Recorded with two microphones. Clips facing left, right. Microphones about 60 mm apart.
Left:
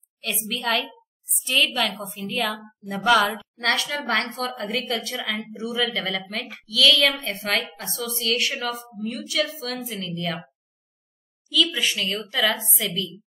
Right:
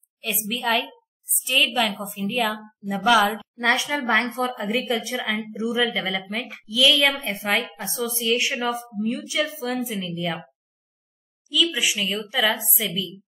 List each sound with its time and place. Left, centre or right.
0.2 s a woman's voice: centre
3.6 s a woman's voice: centre
9.8 s a woman's voice: centre
11.4 s a woman's voice: centre